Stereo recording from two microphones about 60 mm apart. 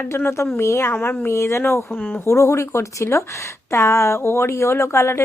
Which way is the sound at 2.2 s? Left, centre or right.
Left.